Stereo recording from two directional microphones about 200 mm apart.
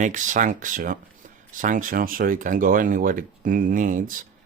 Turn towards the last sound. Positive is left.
turn(degrees=-40)  # may be behind; listen again after turning